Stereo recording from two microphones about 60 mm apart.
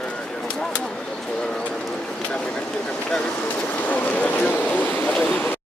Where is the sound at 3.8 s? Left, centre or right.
Left.